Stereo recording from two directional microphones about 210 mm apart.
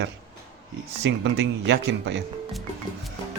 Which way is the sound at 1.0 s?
55° right (ahead or behind).